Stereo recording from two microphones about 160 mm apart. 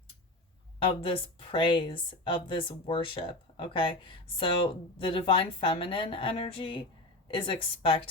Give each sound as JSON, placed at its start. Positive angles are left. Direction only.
{"t": 0.9, "sound": "a woman's voice", "side_deg": 35}